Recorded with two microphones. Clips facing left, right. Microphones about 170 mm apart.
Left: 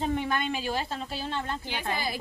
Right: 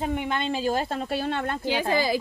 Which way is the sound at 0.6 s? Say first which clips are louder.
Right 6 dB; 55° right (ahead or behind).